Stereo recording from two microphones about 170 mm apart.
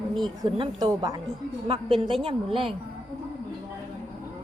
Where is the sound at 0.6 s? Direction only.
25° right (ahead or behind).